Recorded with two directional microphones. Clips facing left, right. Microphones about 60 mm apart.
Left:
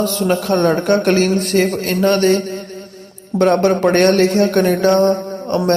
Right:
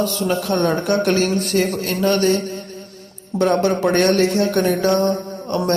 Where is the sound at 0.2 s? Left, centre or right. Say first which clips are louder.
Left 6 dB; left.